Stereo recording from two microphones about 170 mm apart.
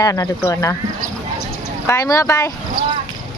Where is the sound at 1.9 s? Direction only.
20° left (ahead or behind).